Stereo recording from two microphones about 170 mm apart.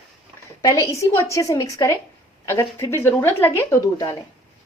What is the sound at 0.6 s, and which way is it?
Speech, 20° left (ahead or behind).